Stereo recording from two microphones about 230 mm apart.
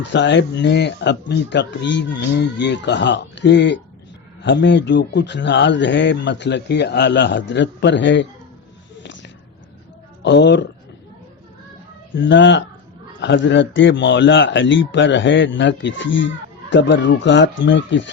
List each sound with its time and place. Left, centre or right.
0.1 s a man's voice: left
9.0 s a sound: left
10.2 s a man's voice: left
12.1 s a man's voice: left